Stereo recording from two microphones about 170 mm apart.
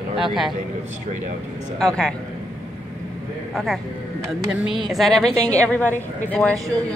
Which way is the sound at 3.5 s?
Centre (ahead or behind).